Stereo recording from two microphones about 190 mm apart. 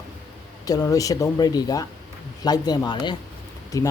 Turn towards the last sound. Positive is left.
turn(degrees=20)  # may be behind; listen again after turning